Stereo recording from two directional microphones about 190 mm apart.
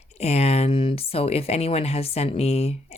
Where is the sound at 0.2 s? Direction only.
35° left (ahead or behind).